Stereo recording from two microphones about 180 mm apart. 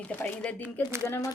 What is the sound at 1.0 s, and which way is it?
Speech, 20° left (ahead or behind).